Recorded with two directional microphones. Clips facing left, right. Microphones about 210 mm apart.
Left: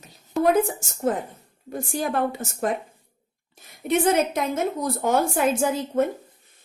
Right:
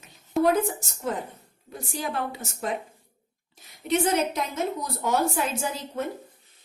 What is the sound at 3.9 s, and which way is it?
A woman's voice, 50° left (ahead or behind).